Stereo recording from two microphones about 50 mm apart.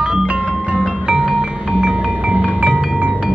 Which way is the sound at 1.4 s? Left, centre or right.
Centre.